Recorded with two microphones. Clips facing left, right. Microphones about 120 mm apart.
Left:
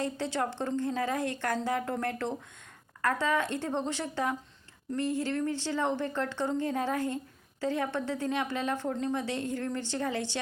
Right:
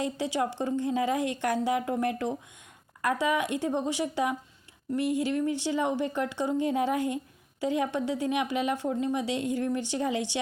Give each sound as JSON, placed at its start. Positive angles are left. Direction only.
{"t": 0.0, "sound": "speech", "side_deg": -15}